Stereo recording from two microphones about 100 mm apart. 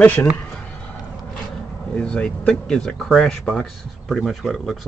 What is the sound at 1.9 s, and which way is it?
Speech, 10° left (ahead or behind).